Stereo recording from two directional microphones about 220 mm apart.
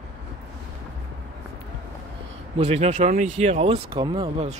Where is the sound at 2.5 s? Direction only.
30° right (ahead or behind).